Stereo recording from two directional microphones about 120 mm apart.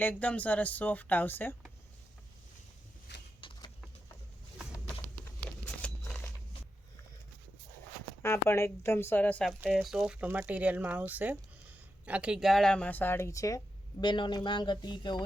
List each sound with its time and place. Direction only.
0.0 s speech: 10° left (ahead or behind)
3.4 s a sound: 40° left (ahead or behind)
5.6 s a sound: 10° left (ahead or behind)
8.2 s a woman's voice: 20° left (ahead or behind)
9.6 s speech: 5° right (ahead or behind); by 13.6 s 25° left (ahead or behind)
14.0 s speech: 40° left (ahead or behind)